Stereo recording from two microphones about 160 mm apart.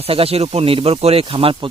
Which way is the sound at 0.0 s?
35° right (ahead or behind).